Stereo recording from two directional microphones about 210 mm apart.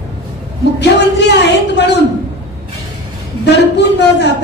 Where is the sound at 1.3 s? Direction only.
55° left (ahead or behind).